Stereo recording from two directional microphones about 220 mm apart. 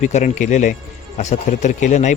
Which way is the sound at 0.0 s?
35° left (ahead or behind).